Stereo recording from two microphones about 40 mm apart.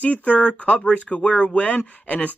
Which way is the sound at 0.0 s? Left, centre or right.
Left.